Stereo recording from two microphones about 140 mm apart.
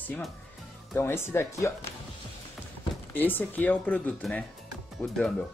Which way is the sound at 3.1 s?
15° left (ahead or behind).